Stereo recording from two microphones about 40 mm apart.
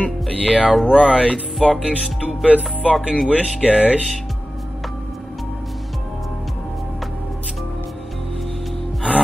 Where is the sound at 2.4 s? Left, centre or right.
Right.